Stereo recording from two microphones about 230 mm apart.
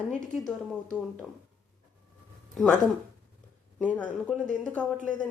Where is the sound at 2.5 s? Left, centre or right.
Centre.